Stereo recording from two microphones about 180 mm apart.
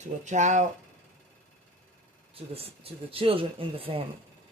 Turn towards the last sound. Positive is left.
turn(degrees=-30)  # may be behind; listen again after turning